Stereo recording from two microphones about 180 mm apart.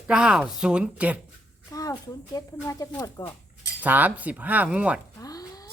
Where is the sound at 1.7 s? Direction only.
20° left (ahead or behind).